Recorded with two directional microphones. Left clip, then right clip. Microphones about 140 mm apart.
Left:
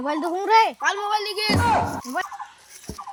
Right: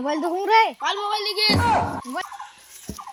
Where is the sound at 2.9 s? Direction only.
15° left (ahead or behind).